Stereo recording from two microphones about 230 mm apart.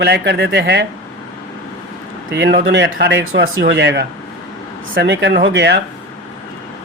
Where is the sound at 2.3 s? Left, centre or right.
Right.